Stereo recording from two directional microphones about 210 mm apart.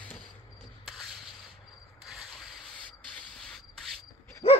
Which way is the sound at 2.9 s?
5° left (ahead or behind).